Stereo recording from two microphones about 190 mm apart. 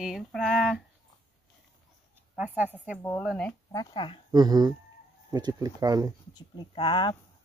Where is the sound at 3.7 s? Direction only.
20° left (ahead or behind).